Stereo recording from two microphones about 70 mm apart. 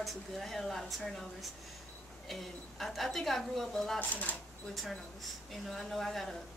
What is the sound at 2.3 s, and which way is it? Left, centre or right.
A woman's voice, centre.